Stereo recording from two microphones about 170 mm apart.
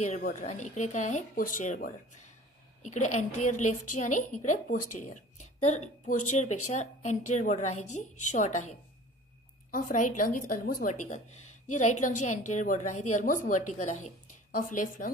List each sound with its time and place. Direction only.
0.0 s a woman's voice: 45° left (ahead or behind)